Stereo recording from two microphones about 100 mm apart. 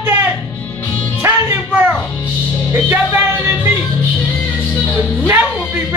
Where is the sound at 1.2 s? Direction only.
25° right (ahead or behind).